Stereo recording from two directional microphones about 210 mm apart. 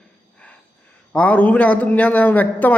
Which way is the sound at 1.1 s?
5° left (ahead or behind).